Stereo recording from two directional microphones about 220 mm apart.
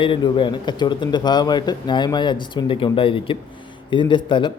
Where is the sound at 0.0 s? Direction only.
25° left (ahead or behind).